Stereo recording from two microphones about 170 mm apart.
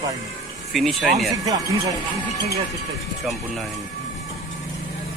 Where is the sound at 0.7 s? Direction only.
Centre (ahead or behind).